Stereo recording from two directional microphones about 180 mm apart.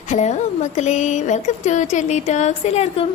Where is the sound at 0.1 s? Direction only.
40° left (ahead or behind).